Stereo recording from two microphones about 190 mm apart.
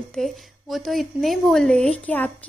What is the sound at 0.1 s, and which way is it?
A woman's voice, centre (ahead or behind).